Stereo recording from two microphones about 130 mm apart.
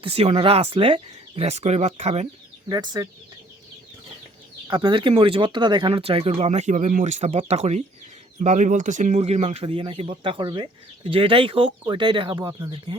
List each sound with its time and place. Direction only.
0.0 s speech: 50° right (ahead or behind)
2.6 s speech: 30° right (ahead or behind)
4.7 s speech: 35° right (ahead or behind); by 7.3 s 65° right (ahead or behind)
7.3 s speech: 50° right (ahead or behind)
8.4 s speech: 70° right (ahead or behind); by 12.5 s 30° right (ahead or behind)